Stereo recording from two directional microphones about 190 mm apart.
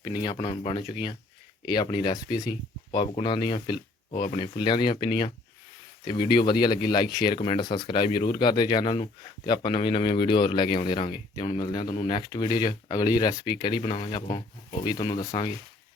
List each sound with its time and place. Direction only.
0.2 s speech: 25° left (ahead or behind)